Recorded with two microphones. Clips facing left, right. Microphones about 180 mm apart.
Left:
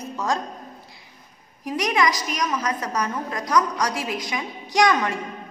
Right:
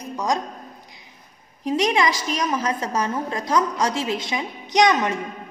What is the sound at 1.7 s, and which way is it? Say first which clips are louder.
A woman's voice: right 2 dB; 25° right (ahead or behind).